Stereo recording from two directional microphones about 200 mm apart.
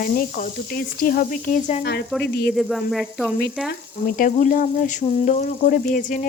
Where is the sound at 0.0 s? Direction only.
45° left (ahead or behind).